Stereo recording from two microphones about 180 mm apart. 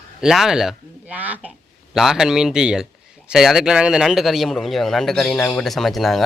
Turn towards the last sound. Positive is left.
turn(degrees=0)  # may be behind; listen again after turning